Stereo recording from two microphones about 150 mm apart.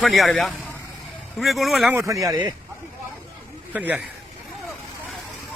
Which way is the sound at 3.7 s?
10° right (ahead or behind).